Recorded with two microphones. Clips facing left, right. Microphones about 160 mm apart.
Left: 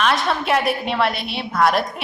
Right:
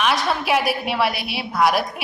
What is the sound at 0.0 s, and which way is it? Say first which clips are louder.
A woman's voice: left 1 dB; centre (ahead or behind).